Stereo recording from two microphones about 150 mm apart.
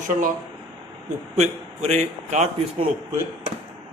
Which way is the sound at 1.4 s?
50° right (ahead or behind).